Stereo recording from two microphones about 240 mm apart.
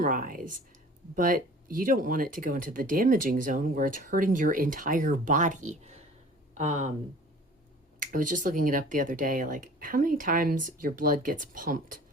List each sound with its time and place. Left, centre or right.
0.0 s speech: right
7.9 s speech: right